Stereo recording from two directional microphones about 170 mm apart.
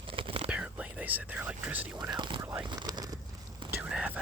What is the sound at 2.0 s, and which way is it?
Speech, 25° right (ahead or behind).